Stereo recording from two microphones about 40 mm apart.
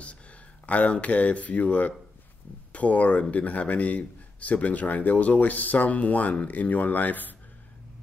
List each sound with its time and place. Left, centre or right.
0.7 s a man's voice: left